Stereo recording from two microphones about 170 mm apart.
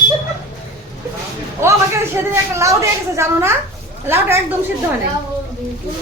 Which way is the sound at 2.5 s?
15° right (ahead or behind).